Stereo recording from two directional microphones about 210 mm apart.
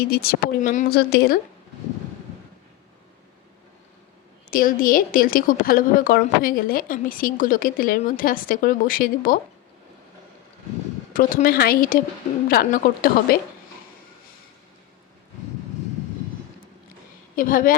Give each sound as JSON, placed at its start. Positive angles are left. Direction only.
{"t": 0.0, "sound": "speech", "side_deg": 45}
{"t": 4.5, "sound": "speech", "side_deg": 40}
{"t": 11.1, "sound": "speech", "side_deg": 40}
{"t": 17.3, "sound": "a woman's voice", "side_deg": 40}